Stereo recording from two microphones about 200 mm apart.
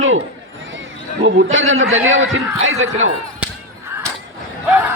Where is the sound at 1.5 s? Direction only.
85° right.